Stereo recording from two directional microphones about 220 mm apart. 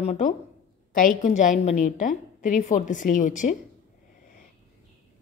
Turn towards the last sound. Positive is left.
turn(degrees=35)  # may be behind; listen again after turning